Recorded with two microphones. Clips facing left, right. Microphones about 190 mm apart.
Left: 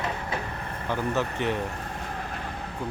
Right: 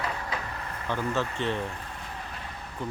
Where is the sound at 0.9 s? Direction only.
15° left (ahead or behind).